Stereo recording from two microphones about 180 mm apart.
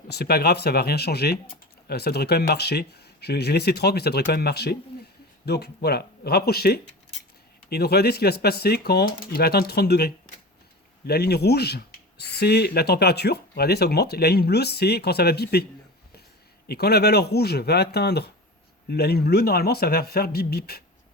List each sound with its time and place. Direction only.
0.1 s speech: 60° left (ahead or behind)
16.6 s speech: 65° left (ahead or behind)